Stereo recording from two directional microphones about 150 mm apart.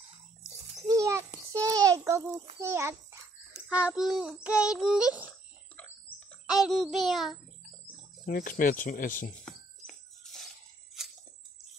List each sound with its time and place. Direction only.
0.8 s a sound: 20° right (ahead or behind)
2.6 s a child's voice: 20° right (ahead or behind)
3.6 s child singing: 5° right (ahead or behind)
5.8 s bird: 10° left (ahead or behind)
6.4 s child singing: 5° right (ahead or behind)
8.3 s speech: 75° left (ahead or behind)
9.4 s music: 5° left (ahead or behind)